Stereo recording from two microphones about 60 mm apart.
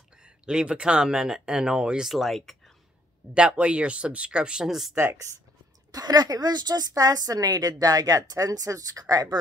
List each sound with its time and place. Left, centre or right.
0.2 s speech: centre
2.0 s speech: centre
3.3 s speech: centre
5.0 s speech: right
5.9 s a woman's voice: right